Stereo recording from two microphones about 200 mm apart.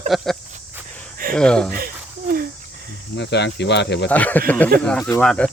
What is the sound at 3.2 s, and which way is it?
Speech, 60° left (ahead or behind).